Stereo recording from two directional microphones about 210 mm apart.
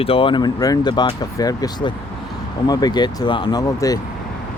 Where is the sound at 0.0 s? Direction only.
25° left (ahead or behind).